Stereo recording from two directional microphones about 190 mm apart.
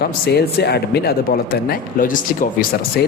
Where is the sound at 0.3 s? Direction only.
60° left (ahead or behind).